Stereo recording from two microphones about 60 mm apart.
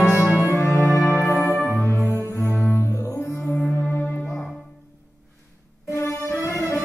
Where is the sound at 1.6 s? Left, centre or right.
Left.